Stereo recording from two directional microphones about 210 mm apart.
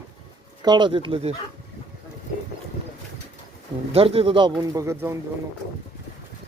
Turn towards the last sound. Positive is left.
turn(degrees=-15)  # may be behind; listen again after turning